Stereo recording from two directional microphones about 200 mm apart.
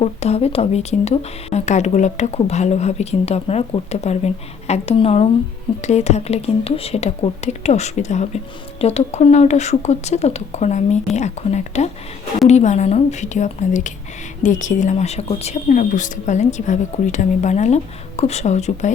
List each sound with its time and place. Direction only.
0.0 s speech: 30° left (ahead or behind)